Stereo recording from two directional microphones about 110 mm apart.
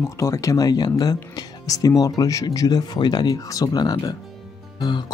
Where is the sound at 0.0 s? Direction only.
30° left (ahead or behind).